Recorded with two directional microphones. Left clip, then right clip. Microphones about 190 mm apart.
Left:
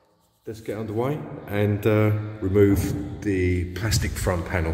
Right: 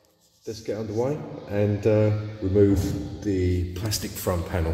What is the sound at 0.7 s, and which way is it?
A man's voice, centre (ahead or behind).